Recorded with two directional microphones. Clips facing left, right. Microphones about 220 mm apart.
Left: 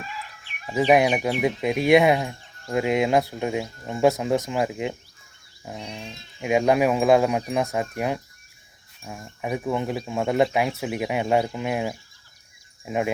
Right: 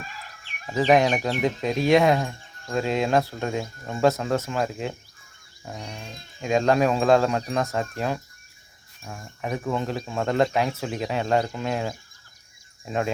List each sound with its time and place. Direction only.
0.0 s chicken: 45° right (ahead or behind)
0.7 s speech: 10° left (ahead or behind)
5.8 s a sound: 5° right (ahead or behind)
6.4 s speech: 10° left (ahead or behind)